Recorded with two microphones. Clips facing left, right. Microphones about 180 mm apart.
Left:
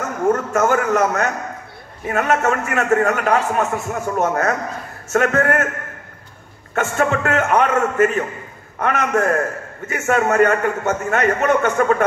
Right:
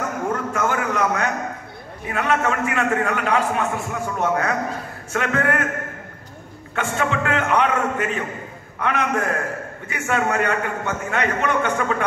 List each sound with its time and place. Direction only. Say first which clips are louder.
0.3 s a man's voice: left 8 dB; 45° left (ahead or behind)
6.7 s a man's voice: left 4 dB; 45° left (ahead or behind)